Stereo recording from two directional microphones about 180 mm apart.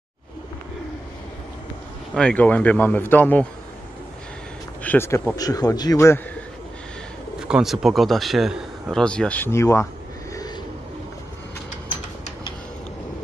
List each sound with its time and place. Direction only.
2.1 s a man's voice: 5° left (ahead or behind)
4.8 s a man's voice: 15° left (ahead or behind)
7.3 s a man's voice: 5° right (ahead or behind); by 9.8 s 15° left (ahead or behind)